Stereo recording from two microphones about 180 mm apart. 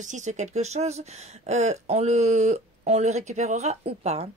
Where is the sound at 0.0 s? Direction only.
40° right (ahead or behind).